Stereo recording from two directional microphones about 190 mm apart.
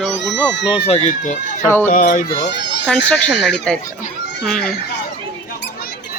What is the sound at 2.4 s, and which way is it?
Speech, 65° left (ahead or behind).